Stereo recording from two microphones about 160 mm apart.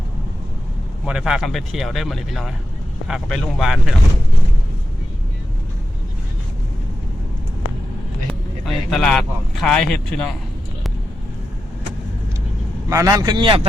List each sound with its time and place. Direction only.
1.0 s speech: 5° right (ahead or behind)
8.3 s speech: centre (ahead or behind)
12.9 s speech: 20° right (ahead or behind)